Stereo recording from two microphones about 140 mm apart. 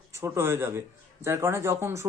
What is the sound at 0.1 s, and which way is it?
Speech, 20° right (ahead or behind).